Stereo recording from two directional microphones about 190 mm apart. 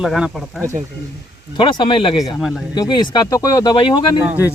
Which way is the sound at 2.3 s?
Centre (ahead or behind).